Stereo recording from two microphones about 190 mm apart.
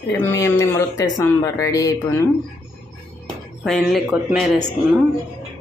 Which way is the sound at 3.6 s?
Centre (ahead or behind).